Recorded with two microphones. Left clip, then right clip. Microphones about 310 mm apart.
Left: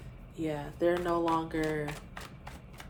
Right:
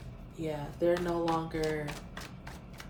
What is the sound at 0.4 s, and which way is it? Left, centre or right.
Speech, left.